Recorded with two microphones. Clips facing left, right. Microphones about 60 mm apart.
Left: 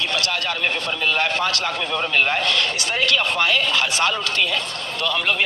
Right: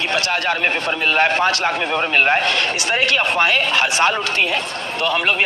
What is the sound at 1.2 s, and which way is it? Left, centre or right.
A woman's voice, right.